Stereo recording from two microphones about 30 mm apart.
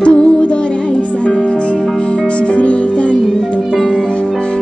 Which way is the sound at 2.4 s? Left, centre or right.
Left.